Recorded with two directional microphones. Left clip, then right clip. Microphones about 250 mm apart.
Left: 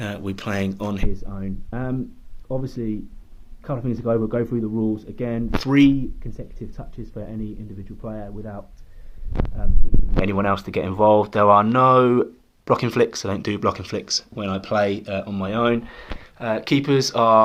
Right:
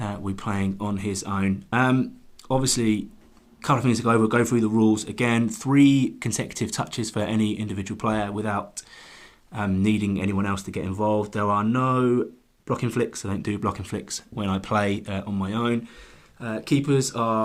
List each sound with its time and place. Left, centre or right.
0.0 s speech: centre
10.2 s speech: centre